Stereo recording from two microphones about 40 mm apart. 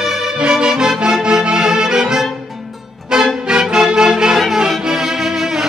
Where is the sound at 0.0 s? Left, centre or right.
Centre.